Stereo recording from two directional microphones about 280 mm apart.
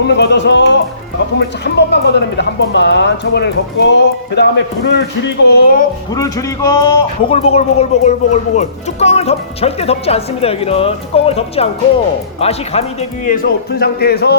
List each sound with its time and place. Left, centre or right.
0.1 s speech: left
6.1 s a man's voice: centre; by 14.3 s left